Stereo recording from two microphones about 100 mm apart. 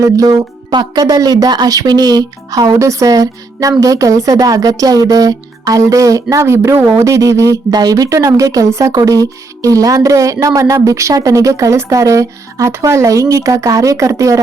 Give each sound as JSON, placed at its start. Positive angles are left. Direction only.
{"t": 0.0, "sound": "speech", "side_deg": -35}
{"t": 0.7, "sound": "speech", "side_deg": -45}